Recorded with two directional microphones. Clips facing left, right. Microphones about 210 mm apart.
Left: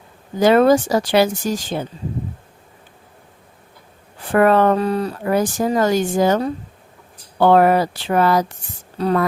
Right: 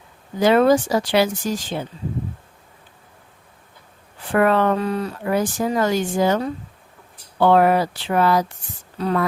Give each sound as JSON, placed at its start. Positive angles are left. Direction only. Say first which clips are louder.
{"t": 0.3, "sound": "speech", "louder": "left 2 dB", "side_deg": 40}
{"t": 4.3, "sound": "speech", "louder": "left 3 dB", "side_deg": 45}